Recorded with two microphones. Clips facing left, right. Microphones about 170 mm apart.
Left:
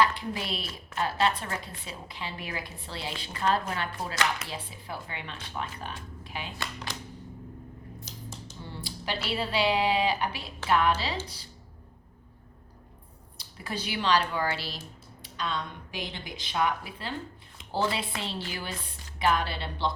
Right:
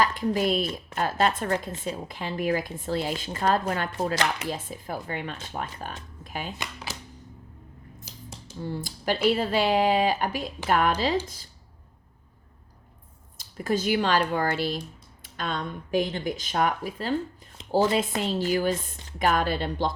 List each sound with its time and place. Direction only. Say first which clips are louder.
0.0 s a woman's voice: right 4 dB; 45° right (ahead or behind)
8.7 s a woman's voice: right 6 dB; 45° right (ahead or behind)
13.3 s a woman's voice: right 10 dB; 45° right (ahead or behind)